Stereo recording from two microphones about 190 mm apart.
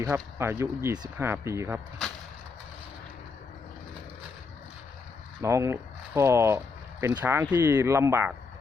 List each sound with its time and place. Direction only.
0.0 s speech: 15° right (ahead or behind)
5.4 s speech: 15° right (ahead or behind)